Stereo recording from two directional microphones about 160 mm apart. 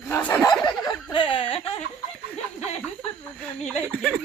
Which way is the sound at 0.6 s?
30° left (ahead or behind).